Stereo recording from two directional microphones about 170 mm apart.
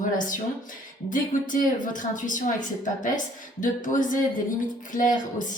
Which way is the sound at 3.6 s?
50° left (ahead or behind).